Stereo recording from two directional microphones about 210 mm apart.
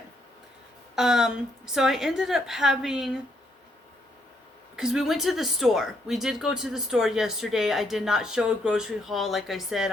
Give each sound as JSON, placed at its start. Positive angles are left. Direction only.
{"t": 0.9, "sound": "speech", "side_deg": 0}
{"t": 4.8, "sound": "speech", "side_deg": 0}